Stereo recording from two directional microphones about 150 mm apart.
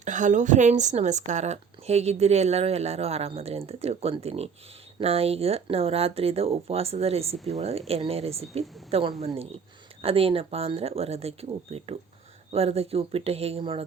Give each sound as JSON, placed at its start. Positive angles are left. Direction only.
{"t": 0.0, "sound": "speech", "side_deg": -55}